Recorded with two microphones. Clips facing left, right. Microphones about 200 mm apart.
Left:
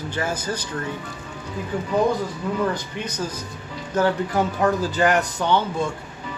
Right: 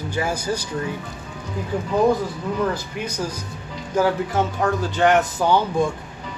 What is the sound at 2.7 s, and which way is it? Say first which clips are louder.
A man's voice: right 1 dB; 10° right (ahead or behind).